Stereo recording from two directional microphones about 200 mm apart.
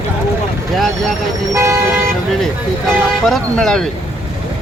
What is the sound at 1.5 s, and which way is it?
Speech, 15° right (ahead or behind).